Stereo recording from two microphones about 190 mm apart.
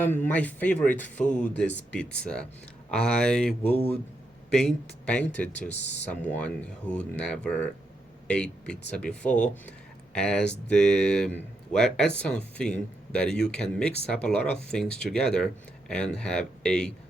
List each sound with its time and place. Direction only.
0.0 s speech: 10° left (ahead or behind)
5.6 s speech: 35° left (ahead or behind)
6.1 s speech: 5° left (ahead or behind)